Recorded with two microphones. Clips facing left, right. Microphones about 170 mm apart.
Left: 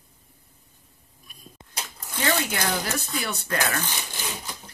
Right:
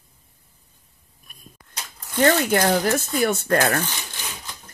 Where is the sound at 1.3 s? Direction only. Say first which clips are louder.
Right 1 dB; 50° right (ahead or behind).